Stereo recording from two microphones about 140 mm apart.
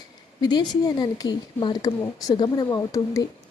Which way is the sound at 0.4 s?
30° left (ahead or behind).